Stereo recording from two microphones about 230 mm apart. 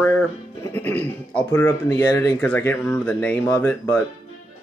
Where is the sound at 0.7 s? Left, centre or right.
Centre.